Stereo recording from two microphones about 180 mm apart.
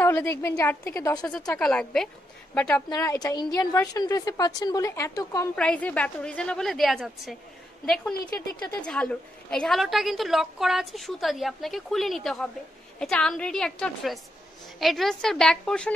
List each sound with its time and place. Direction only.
0.0 s a woman's voice: 15° left (ahead or behind)
1.5 s a woman's voice: 5° left (ahead or behind)
2.9 s a woman's voice: 20° left (ahead or behind)
5.6 s a woman's voice: 5° left (ahead or behind)